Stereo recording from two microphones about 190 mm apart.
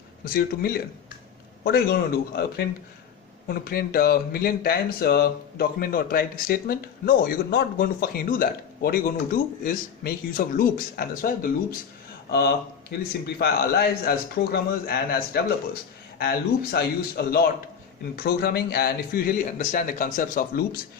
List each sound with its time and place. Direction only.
0.3 s a man's voice: 50° left (ahead or behind)
12.3 s a man's voice: 55° left (ahead or behind)